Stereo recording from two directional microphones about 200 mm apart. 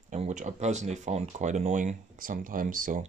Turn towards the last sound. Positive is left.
turn(degrees=-40)  # may be behind; listen again after turning